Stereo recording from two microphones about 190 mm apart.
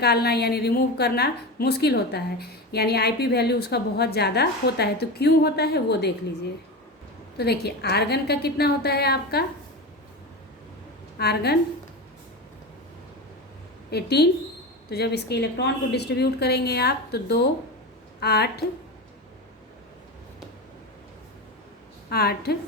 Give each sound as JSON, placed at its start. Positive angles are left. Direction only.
{"t": 0.0, "sound": "a woman's voice", "side_deg": 55}
{"t": 7.3, "sound": "a woman's voice", "side_deg": 60}
{"t": 11.2, "sound": "a woman's voice", "side_deg": 60}
{"t": 13.9, "sound": "a woman's voice", "side_deg": 60}
{"t": 22.1, "sound": "a woman's voice", "side_deg": 55}